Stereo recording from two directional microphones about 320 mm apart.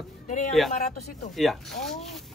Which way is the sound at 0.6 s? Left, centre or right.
Centre.